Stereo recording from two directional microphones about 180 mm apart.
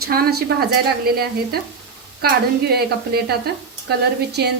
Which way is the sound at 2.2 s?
60° right (ahead or behind).